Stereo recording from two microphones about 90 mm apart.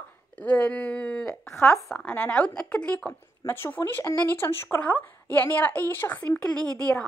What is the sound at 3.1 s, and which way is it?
Speech, 25° left (ahead or behind).